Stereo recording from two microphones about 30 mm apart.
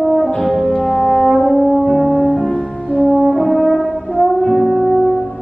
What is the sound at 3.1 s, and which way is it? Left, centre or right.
Brass instrument, centre.